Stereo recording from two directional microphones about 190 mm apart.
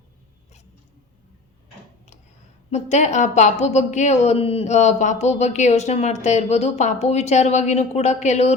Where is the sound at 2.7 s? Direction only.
35° left (ahead or behind).